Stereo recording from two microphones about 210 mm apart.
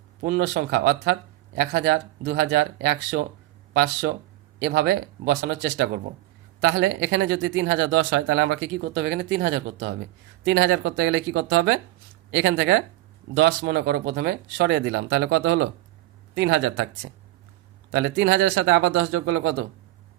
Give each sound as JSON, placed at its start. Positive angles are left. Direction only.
{"t": 0.2, "sound": "speech", "side_deg": -50}
{"t": 17.9, "sound": "speech", "side_deg": -65}